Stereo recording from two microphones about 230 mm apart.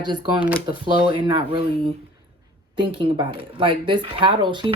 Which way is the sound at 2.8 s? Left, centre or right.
Right.